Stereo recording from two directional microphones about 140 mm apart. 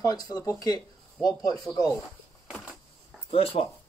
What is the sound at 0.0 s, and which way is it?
Speech, 30° left (ahead or behind).